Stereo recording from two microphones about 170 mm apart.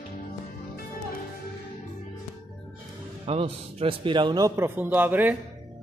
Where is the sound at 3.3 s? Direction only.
35° right (ahead or behind).